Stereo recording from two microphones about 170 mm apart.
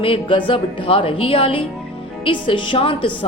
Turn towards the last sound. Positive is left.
turn(degrees=30)  # may be behind; listen again after turning